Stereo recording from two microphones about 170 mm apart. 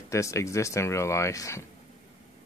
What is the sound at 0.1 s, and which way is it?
Speech, 15° left (ahead or behind).